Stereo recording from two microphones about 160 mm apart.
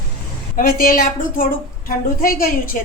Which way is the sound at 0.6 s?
65° left (ahead or behind).